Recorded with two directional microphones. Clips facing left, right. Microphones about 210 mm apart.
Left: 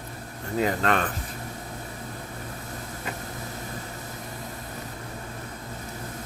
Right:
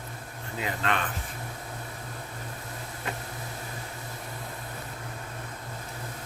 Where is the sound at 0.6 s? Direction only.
45° left (ahead or behind).